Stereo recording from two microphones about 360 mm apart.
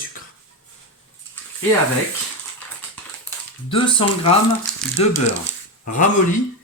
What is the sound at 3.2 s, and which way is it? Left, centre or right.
Speech, centre.